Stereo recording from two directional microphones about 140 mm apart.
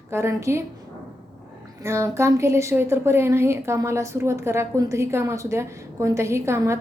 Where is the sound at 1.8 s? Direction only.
20° right (ahead or behind).